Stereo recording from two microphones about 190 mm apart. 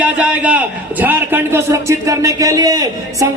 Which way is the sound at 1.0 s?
10° right (ahead or behind).